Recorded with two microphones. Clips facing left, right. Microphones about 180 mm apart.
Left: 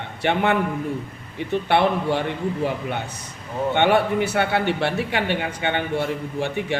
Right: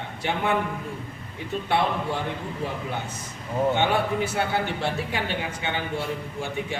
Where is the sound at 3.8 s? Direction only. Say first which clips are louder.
Left 5 dB; 70° left (ahead or behind).